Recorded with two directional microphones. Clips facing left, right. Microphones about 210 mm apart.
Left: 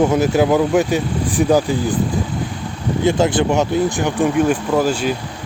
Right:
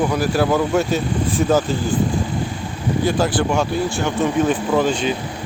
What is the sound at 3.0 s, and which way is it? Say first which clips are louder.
Speech: left 4 dB; 20° left (ahead or behind).